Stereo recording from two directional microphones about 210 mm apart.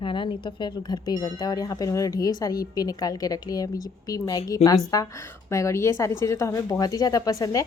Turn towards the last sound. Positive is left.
turn(degrees=15)  # may be behind; listen again after turning